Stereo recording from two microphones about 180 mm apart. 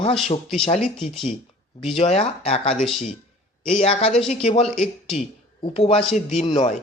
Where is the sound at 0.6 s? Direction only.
40° left (ahead or behind).